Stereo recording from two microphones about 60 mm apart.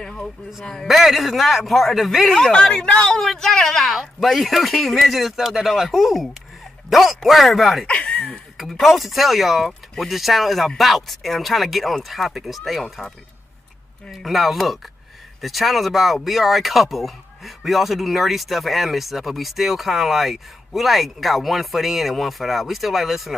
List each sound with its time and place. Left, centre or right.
0.0 s a sound: centre
0.8 s a man's voice: centre
7.8 s speech: centre
8.5 s a man's voice: centre
14.1 s a man's voice: centre